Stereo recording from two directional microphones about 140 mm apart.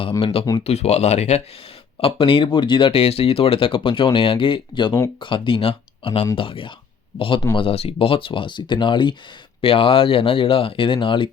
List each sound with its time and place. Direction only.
0.0 s speech: 40° left (ahead or behind)
2.0 s speech: 40° left (ahead or behind)